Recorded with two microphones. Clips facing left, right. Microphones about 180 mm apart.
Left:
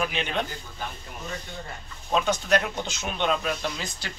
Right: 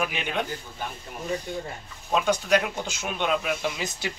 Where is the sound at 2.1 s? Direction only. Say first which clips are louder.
Right 1 dB; 10° right (ahead or behind).